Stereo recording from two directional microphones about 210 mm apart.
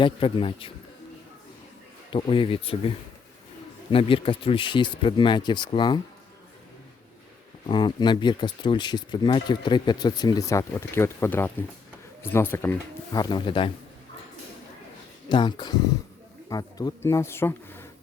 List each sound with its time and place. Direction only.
0.0 s speech: 25° left (ahead or behind)
2.0 s speech: 25° left (ahead or behind)
3.9 s speech: 25° left (ahead or behind)
7.7 s speech: 20° left (ahead or behind)
15.3 s speech: 20° left (ahead or behind)